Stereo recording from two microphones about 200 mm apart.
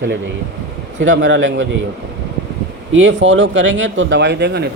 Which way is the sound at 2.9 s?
65° right (ahead or behind).